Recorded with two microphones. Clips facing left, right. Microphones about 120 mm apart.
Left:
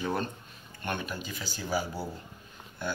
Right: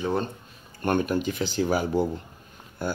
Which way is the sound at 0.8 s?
50° right (ahead or behind).